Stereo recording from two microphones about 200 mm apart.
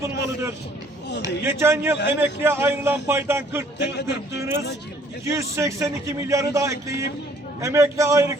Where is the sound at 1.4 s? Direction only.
10° right (ahead or behind).